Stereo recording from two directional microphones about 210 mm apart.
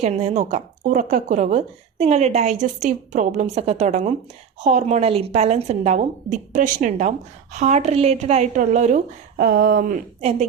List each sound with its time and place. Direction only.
0.0 s speech: 30° right (ahead or behind)
9.4 s speech: 45° right (ahead or behind)